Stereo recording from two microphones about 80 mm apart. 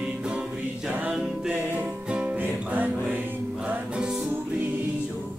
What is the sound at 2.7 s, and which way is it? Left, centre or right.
Music, right.